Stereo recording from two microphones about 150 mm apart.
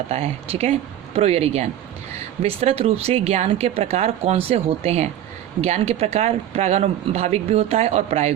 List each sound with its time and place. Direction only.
0.1 s speech: 40° right (ahead or behind)